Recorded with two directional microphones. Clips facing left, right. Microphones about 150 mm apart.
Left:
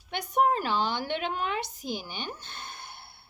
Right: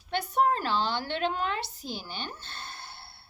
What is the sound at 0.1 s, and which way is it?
A woman's voice, 15° left (ahead or behind).